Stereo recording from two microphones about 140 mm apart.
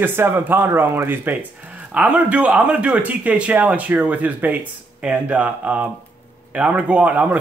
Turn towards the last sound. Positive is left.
turn(degrees=-10)  # may be behind; listen again after turning